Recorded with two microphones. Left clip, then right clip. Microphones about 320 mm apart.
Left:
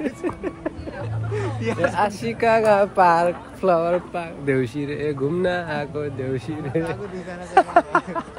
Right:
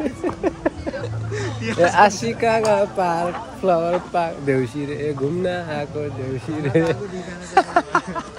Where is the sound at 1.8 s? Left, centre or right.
Right.